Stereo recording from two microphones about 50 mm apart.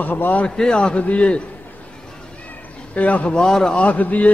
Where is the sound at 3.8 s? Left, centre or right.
Left.